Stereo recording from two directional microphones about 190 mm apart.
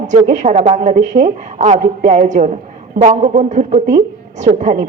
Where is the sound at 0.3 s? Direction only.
40° right (ahead or behind).